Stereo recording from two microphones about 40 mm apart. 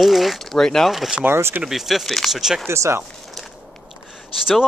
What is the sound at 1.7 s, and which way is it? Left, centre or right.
Speech, centre.